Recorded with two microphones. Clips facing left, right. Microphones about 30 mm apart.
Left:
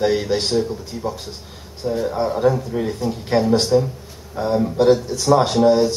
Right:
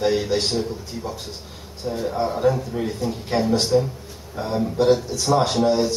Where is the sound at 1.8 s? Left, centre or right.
Centre.